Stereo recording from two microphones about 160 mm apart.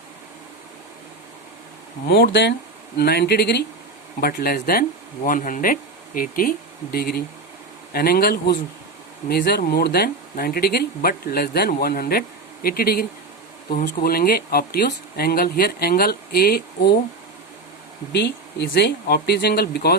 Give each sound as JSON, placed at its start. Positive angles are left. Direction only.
{"t": 2.0, "sound": "speech", "side_deg": 90}
{"t": 3.0, "sound": "speech", "side_deg": 80}
{"t": 4.2, "sound": "speech", "side_deg": 70}
{"t": 18.1, "sound": "speech", "side_deg": 90}